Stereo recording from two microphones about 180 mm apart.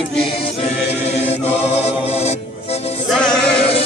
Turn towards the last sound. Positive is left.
turn(degrees=5)  # may be behind; listen again after turning